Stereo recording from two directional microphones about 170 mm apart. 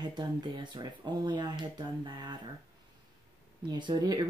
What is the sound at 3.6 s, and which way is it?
Speech, 25° right (ahead or behind).